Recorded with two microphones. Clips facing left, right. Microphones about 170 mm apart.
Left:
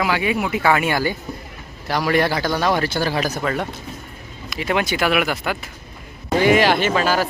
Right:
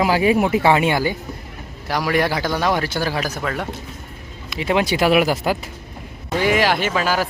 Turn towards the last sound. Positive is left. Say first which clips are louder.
# left 2 dB
turn(degrees=-10)  # may be behind; listen again after turning